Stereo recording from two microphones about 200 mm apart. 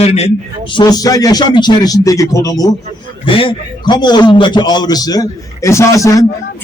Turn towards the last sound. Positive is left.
turn(degrees=15)  # may be behind; listen again after turning